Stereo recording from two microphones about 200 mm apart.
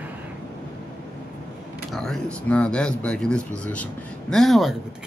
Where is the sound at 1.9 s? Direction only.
Centre (ahead or behind).